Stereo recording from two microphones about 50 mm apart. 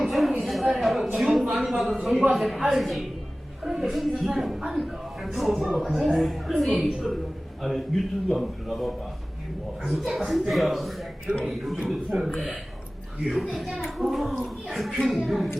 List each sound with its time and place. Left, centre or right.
0.0 s a sound: centre
1.8 s a man's voice: centre
9.9 s a man's voice: centre
12.1 s a man's voice: centre
13.2 s a man's voice: centre